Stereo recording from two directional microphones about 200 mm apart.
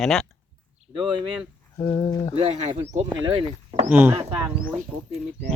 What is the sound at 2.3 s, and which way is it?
Speech, 30° right (ahead or behind).